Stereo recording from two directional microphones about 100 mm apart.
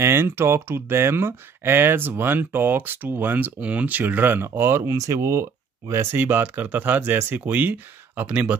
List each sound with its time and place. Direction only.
0.0 s speech: 25° right (ahead or behind)